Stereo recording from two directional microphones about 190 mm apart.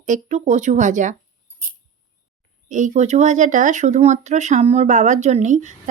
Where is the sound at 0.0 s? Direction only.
40° right (ahead or behind).